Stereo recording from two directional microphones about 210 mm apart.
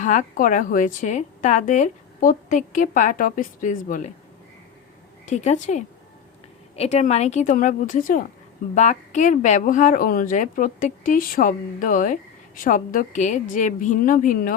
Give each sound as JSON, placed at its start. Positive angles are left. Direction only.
{"t": 0.0, "sound": "a woman's voice", "side_deg": 35}
{"t": 5.2, "sound": "a woman's voice", "side_deg": 35}